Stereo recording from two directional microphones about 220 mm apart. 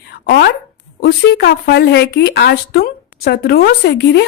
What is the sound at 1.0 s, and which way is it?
Speech, 45° left (ahead or behind).